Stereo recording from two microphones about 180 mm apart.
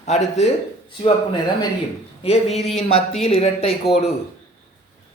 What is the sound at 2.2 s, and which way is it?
Speech, 35° left (ahead or behind).